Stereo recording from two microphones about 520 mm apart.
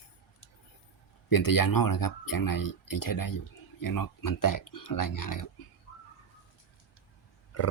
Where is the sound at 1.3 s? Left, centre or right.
Left.